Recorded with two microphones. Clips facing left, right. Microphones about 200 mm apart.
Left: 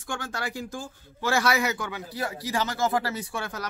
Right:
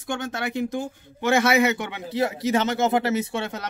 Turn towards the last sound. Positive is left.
turn(degrees=-25)  # may be behind; listen again after turning